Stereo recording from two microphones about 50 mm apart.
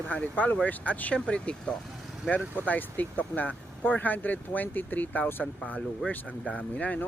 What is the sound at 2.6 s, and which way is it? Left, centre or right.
Speech, left.